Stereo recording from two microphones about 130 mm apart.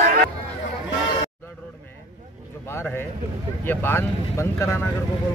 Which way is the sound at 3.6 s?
15° left (ahead or behind).